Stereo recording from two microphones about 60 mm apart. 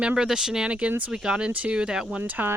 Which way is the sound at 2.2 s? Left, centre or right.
Right.